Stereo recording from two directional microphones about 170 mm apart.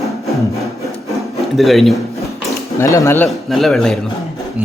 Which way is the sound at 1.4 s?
Centre (ahead or behind).